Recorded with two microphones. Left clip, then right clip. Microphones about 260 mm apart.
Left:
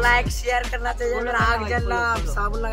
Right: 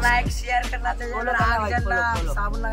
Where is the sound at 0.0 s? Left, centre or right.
Centre.